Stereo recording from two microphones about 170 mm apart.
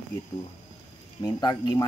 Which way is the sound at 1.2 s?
25° left (ahead or behind).